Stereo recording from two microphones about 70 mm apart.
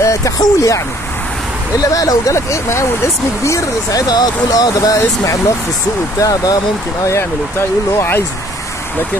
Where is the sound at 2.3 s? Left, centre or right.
Left.